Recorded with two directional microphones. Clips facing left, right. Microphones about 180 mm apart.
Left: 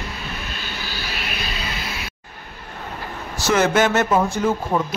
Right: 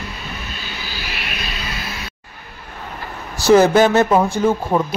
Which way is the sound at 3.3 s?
35° right (ahead or behind).